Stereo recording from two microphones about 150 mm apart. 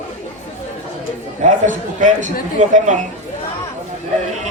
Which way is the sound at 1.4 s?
55° right (ahead or behind).